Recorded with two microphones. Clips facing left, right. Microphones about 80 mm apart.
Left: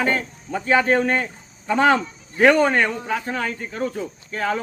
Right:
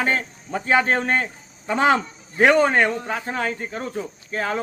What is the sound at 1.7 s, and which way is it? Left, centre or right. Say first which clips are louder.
Speech: left 1 dB; centre.